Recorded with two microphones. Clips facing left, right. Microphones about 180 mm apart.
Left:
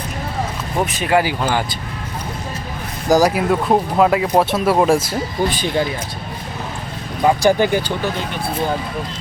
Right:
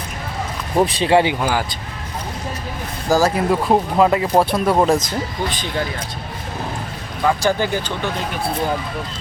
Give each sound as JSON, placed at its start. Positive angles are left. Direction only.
{"t": 0.9, "sound": "speech", "side_deg": -30}
{"t": 1.4, "sound": "speech", "side_deg": -10}
{"t": 3.1, "sound": "speech", "side_deg": 15}
{"t": 3.5, "sound": "speech", "side_deg": 0}
{"t": 7.2, "sound": "speech", "side_deg": 20}